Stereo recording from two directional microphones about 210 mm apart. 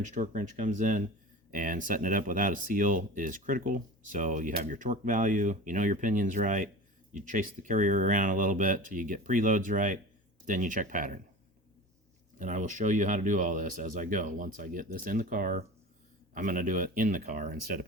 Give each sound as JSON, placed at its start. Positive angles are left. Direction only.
{"t": 0.0, "sound": "speech", "side_deg": -35}
{"t": 12.4, "sound": "speech", "side_deg": -35}